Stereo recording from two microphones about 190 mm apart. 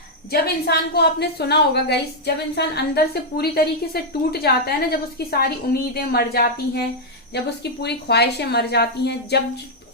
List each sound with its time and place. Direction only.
0.3 s a woman's voice: 55° left (ahead or behind)